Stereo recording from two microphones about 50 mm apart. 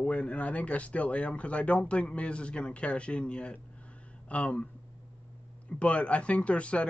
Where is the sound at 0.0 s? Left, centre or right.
Left.